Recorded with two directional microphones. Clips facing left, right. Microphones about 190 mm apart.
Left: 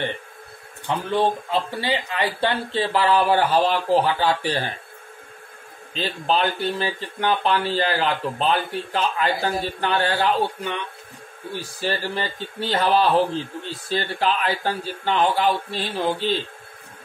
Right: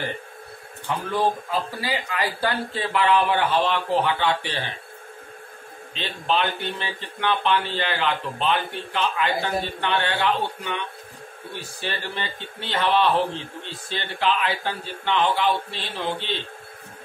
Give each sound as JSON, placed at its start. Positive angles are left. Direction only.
{"t": 1.1, "sound": "a man's voice", "side_deg": 30}
{"t": 5.9, "sound": "a man's voice", "side_deg": 40}
{"t": 11.8, "sound": "a man's voice", "side_deg": 40}